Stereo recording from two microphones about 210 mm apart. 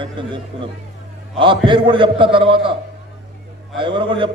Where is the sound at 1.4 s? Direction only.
25° right (ahead or behind).